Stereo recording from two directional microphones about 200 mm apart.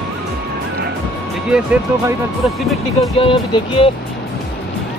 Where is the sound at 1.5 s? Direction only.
5° right (ahead or behind).